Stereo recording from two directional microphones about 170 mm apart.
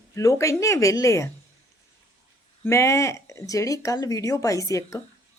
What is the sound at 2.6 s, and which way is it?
Speech, 15° left (ahead or behind).